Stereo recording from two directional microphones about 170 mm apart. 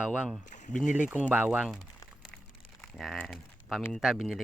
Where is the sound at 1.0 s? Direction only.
10° right (ahead or behind).